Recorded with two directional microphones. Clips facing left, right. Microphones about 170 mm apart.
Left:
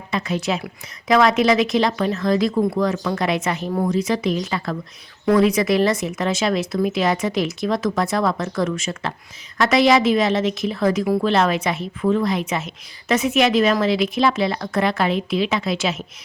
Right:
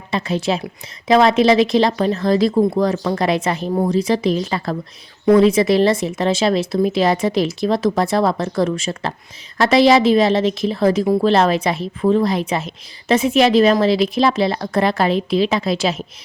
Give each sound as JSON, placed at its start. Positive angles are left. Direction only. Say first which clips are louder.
{"t": 0.1, "sound": "a woman's voice", "louder": "right 3 dB", "side_deg": -30}